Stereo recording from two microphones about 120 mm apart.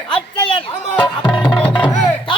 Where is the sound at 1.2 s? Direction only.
15° left (ahead or behind).